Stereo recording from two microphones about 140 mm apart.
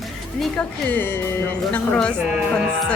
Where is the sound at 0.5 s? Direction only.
10° left (ahead or behind).